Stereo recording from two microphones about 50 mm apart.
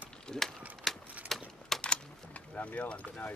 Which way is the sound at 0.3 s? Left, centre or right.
Centre.